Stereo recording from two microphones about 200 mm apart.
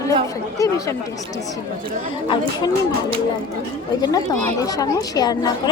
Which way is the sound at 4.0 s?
20° left (ahead or behind).